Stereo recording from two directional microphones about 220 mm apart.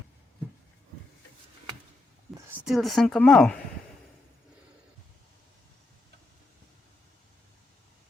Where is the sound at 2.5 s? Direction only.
Centre (ahead or behind).